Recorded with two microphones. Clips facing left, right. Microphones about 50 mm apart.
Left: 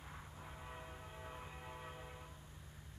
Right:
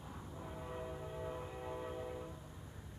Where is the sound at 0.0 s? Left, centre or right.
Centre.